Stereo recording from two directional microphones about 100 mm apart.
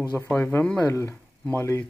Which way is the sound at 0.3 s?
20° left (ahead or behind).